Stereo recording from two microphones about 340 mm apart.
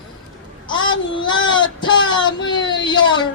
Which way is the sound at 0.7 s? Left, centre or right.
Centre.